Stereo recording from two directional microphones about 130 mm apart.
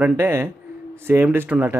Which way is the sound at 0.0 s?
15° right (ahead or behind).